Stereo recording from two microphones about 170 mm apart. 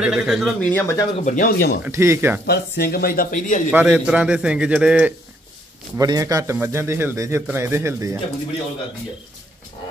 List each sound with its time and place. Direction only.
0.0 s a man's voice: 5° right (ahead or behind)
0.6 s speech: 10° left (ahead or behind)
1.1 s speech: 45° left (ahead or behind)
1.9 s a man's voice: 15° right (ahead or behind)
2.4 s speech: 70° left (ahead or behind); by 3.6 s 50° left (ahead or behind)
3.7 s a man's voice: 5° right (ahead or behind)
5.9 s a man's voice: 20° right (ahead or behind)